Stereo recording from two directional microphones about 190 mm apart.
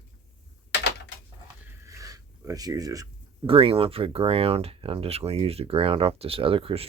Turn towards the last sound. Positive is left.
turn(degrees=-30)  # may be behind; listen again after turning